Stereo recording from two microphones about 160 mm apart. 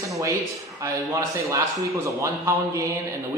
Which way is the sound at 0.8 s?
20° right (ahead or behind).